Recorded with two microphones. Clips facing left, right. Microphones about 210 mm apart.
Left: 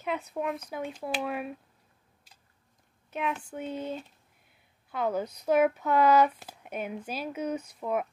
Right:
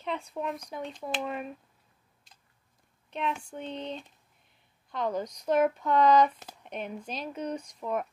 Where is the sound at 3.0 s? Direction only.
5° left (ahead or behind).